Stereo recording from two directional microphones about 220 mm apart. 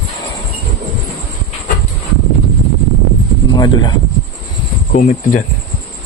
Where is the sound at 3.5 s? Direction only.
20° left (ahead or behind).